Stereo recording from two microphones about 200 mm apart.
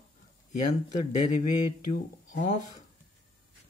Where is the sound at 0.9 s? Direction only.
35° left (ahead or behind).